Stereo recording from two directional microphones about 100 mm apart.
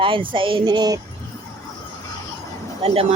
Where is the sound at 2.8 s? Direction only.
80° right.